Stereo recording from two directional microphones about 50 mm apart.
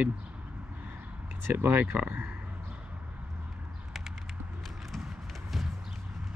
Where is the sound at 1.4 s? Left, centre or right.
Right.